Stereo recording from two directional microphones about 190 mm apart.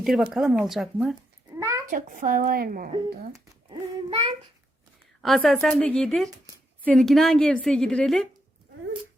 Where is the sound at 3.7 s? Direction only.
25° right (ahead or behind).